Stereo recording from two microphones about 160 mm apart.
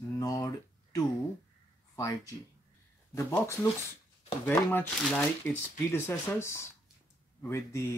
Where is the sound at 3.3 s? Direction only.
10° left (ahead or behind).